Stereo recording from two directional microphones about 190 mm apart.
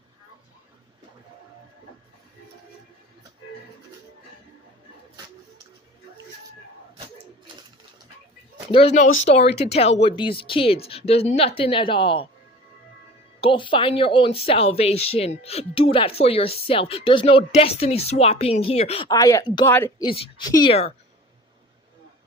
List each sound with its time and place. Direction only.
7.5 s pigeon: 25° right (ahead or behind)
8.7 s speech: 35° left (ahead or behind)
13.4 s speech: 25° left (ahead or behind)
19.0 s speech: 20° left (ahead or behind)
20.1 s speech: 30° left (ahead or behind)